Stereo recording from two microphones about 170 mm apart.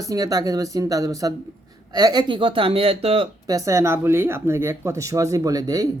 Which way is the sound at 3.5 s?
20° right (ahead or behind).